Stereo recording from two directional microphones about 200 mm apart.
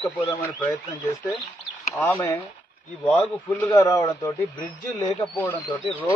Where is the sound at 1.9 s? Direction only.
15° left (ahead or behind).